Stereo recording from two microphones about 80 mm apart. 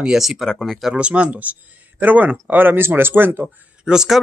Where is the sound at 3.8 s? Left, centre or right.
Centre.